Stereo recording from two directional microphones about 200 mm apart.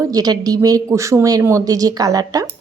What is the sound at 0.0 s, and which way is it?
A woman's voice, 20° right (ahead or behind).